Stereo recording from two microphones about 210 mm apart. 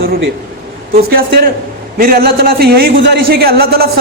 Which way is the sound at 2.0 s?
45° right (ahead or behind).